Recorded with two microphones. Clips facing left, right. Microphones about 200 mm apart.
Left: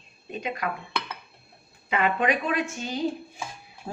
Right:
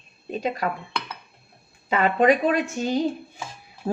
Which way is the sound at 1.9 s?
40° right (ahead or behind).